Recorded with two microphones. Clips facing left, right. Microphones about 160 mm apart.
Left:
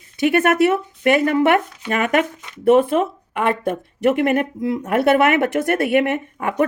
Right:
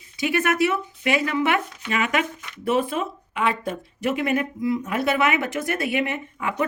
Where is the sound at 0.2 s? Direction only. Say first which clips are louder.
Left 6 dB; 60° left (ahead or behind).